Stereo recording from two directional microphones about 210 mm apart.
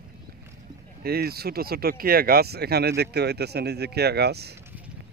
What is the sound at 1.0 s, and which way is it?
Speech, 50° right (ahead or behind).